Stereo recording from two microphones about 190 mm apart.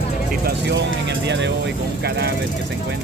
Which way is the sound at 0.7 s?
65° right (ahead or behind).